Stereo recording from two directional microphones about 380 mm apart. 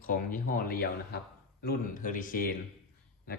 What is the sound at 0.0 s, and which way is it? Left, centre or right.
Speech, left.